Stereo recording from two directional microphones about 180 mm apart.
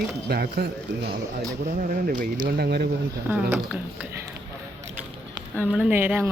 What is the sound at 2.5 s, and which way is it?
Speech, 65° right (ahead or behind).